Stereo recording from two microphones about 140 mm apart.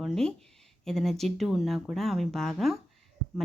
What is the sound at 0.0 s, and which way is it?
A woman's voice, 5° left (ahead or behind).